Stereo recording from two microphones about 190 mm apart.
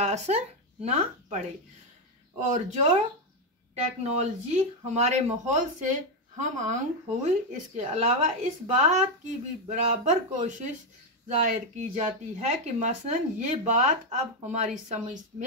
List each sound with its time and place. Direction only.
0.0 s speech: 35° right (ahead or behind)
2.4 s speech: 40° right (ahead or behind)